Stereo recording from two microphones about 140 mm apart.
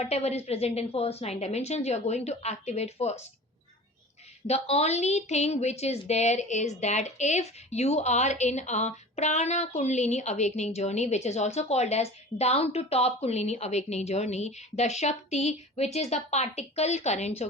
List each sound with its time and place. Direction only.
0.0 s speech: 50° left (ahead or behind)
4.4 s speech: 50° left (ahead or behind)